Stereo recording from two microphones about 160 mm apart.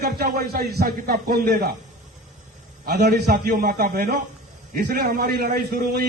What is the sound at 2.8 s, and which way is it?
A man's voice, 80° right.